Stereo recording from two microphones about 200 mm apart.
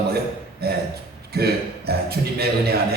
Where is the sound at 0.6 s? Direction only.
50° right (ahead or behind).